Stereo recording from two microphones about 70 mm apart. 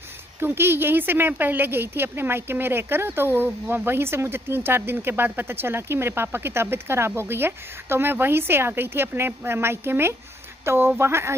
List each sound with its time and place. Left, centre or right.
0.4 s speech: right